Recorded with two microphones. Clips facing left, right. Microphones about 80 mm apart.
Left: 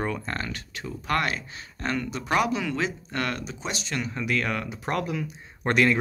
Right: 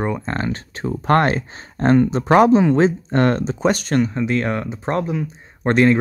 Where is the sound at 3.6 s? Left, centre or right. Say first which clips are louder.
Right 15 dB; right.